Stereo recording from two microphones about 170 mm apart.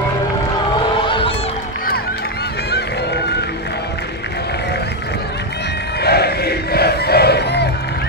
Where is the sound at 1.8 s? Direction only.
70° left (ahead or behind).